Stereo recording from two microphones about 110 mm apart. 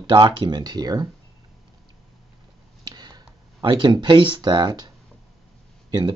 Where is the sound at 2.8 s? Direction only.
40° right (ahead or behind).